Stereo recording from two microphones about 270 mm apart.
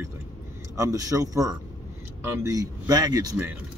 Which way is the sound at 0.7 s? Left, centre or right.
Centre.